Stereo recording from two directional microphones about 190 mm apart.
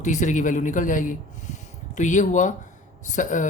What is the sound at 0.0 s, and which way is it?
Speech, 40° left (ahead or behind).